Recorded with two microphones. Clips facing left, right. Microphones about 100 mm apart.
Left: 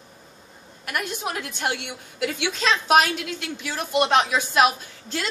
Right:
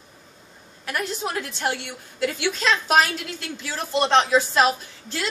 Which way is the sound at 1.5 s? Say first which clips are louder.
Left 1 dB; 20° left (ahead or behind).